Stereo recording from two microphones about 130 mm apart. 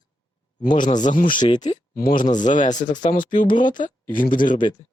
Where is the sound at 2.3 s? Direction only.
75° left (ahead or behind).